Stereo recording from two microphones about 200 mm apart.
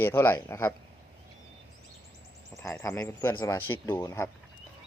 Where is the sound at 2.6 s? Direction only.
15° left (ahead or behind).